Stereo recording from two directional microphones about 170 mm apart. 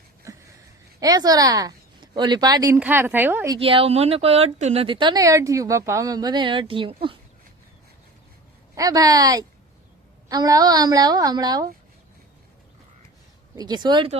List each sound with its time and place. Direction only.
0.3 s a sound: 20° right (ahead or behind)
0.9 s a woman's voice: 20° right (ahead or behind)
3.5 s a woman's voice: 30° right (ahead or behind)
8.7 s a woman's voice: 20° right (ahead or behind)
13.6 s a woman's voice: 25° right (ahead or behind)